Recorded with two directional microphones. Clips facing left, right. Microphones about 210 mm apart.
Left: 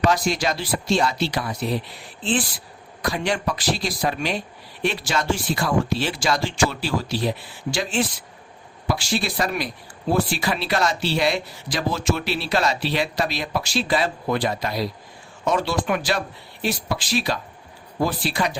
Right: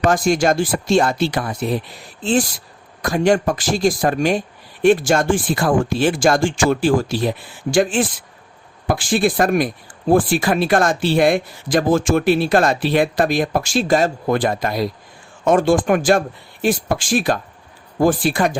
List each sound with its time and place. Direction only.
0.1 s speech: 50° right (ahead or behind)